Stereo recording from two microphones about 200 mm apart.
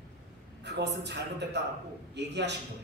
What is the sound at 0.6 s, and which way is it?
A man's voice, 60° right (ahead or behind).